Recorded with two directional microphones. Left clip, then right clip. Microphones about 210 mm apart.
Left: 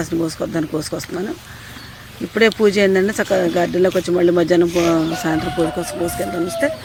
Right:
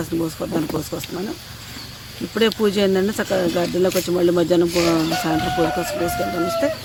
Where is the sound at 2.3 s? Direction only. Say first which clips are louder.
Left 4 dB; 5° left (ahead or behind).